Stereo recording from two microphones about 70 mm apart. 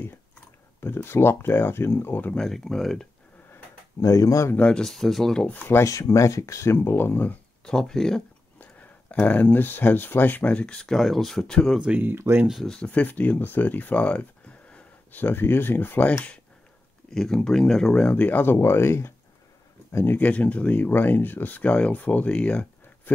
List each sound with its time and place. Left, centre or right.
0.8 s speech: left
2.3 s speech: centre
4.0 s speech: left
4.6 s speech: centre
4.8 s speech: centre
5.5 s speech: left
5.9 s speech: left
7.6 s speech: centre
9.2 s speech: left
12.0 s speech: right
12.6 s speech: centre
17.1 s speech: centre; by 20.2 s left
20.2 s speech: left